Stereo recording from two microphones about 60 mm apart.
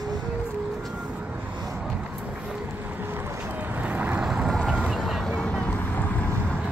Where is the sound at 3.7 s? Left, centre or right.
Right; by 5.2 s centre.